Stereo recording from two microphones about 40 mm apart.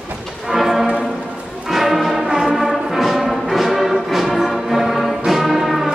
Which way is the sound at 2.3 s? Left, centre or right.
Centre.